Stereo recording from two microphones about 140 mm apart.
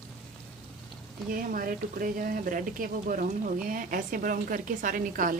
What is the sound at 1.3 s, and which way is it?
A woman's voice, 85° right.